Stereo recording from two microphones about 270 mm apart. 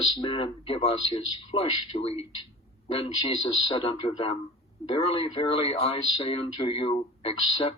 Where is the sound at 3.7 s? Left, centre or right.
Left.